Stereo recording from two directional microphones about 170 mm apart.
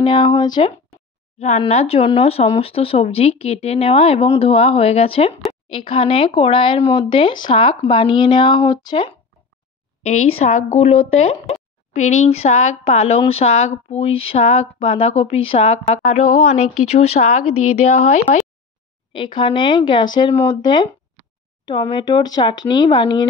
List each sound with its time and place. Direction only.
0.0 s speech: 30° left (ahead or behind)
1.4 s speech: 40° left (ahead or behind)
10.0 s speech: 45° left (ahead or behind)
19.1 s speech: 30° left (ahead or behind)